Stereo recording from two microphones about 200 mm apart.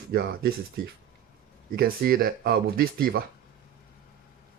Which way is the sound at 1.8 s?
50° right (ahead or behind).